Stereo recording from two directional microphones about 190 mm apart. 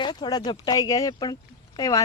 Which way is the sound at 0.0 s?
20° left (ahead or behind).